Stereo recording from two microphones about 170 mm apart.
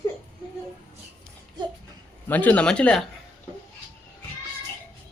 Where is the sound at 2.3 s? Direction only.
10° left (ahead or behind).